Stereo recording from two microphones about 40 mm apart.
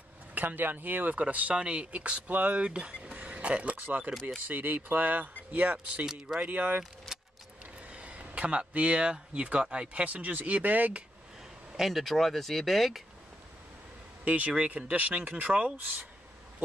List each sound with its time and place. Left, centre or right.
0.3 s speech: right
1.5 s speech: right
3.7 s speech: right
6.0 s speech: centre
6.4 s speech: right
7.1 s keys jangling: centre
7.8 s speech: right
11.7 s speech: centre
14.2 s speech: right
15.8 s speech: right